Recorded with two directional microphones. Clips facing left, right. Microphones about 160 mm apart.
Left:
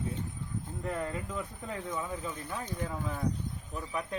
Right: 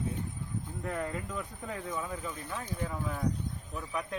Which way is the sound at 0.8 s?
15° left (ahead or behind).